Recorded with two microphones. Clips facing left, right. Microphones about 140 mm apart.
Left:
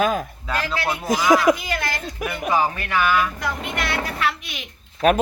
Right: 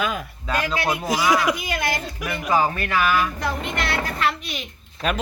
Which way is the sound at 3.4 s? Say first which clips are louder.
Right 1 dB; 5° left (ahead or behind).